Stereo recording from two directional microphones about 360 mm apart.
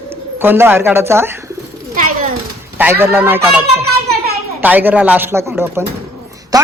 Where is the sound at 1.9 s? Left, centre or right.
Right.